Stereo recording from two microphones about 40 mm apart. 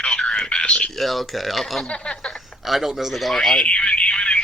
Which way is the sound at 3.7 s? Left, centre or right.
Left.